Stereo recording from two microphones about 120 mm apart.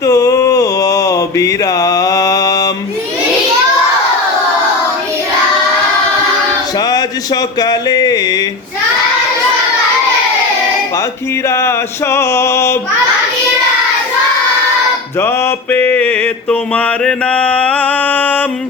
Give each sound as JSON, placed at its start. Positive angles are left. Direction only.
{"t": 0.0, "sound": "mantra", "side_deg": 25}
{"t": 6.7, "sound": "music", "side_deg": 35}
{"t": 11.4, "sound": "music", "side_deg": 20}
{"t": 15.2, "sound": "mantra", "side_deg": 20}